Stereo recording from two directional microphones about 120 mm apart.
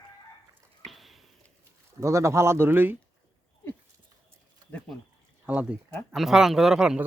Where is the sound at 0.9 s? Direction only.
Centre (ahead or behind).